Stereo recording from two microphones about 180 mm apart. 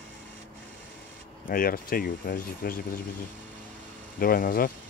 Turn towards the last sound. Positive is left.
turn(degrees=55)  # may be behind; listen again after turning